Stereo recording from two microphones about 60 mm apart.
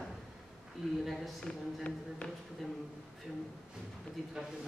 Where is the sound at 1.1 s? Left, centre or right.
Centre.